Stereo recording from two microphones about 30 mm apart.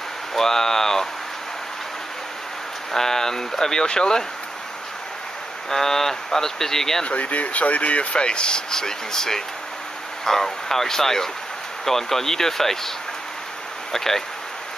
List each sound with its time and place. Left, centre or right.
0.3 s speech: centre
2.9 s speech: centre
3.8 s speech: left
5.7 s speech: centre
7.1 s speech: left; by 12.9 s centre
13.9 s speech: centre